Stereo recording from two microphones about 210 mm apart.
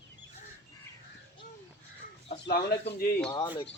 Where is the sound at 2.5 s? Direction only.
50° left (ahead or behind).